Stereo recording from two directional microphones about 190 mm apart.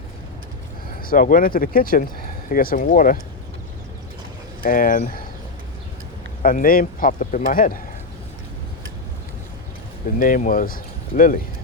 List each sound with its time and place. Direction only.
1.0 s speech: 45° left (ahead or behind)
4.6 s speech: 45° left (ahead or behind)
6.4 s speech: 50° left (ahead or behind)
10.2 s speech: 45° left (ahead or behind)